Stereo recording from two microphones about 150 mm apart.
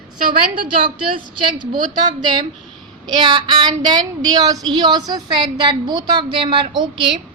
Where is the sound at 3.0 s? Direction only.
30° right (ahead or behind).